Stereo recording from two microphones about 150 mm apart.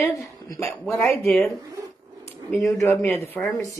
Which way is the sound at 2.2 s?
20° left (ahead or behind).